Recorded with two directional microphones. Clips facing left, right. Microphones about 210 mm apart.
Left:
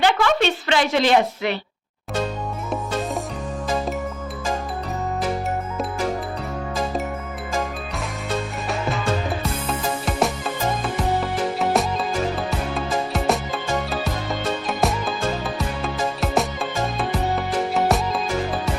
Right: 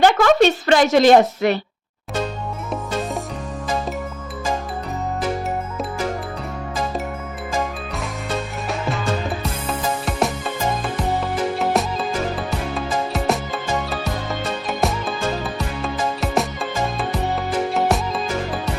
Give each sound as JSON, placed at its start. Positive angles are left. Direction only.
{"t": 0.0, "sound": "a woman's voice", "side_deg": -45}
{"t": 9.4, "sound": "music", "side_deg": 0}
{"t": 11.6, "sound": "music", "side_deg": 0}
{"t": 14.7, "sound": "music", "side_deg": 0}
{"t": 17.7, "sound": "music", "side_deg": 0}